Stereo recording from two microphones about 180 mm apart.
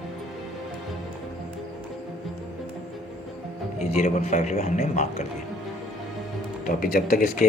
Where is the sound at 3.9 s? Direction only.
40° left (ahead or behind).